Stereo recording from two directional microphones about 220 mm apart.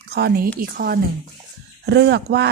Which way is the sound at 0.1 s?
45° right (ahead or behind).